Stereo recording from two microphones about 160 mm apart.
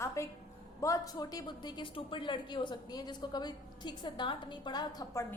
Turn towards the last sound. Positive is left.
turn(degrees=20)  # may be behind; listen again after turning